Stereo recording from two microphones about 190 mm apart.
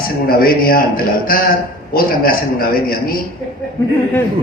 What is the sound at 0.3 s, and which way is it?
Speech, 50° left (ahead or behind).